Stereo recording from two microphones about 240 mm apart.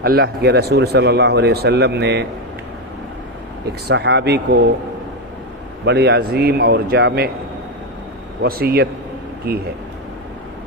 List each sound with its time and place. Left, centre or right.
0.0 s speech: right
3.7 s speech: right
5.8 s speech: right
8.4 s speech: right